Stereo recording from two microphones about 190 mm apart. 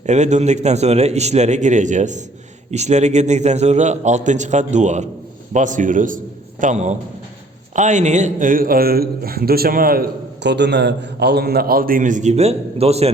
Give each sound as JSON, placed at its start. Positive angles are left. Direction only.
{"t": 0.0, "sound": "a man's voice", "side_deg": -35}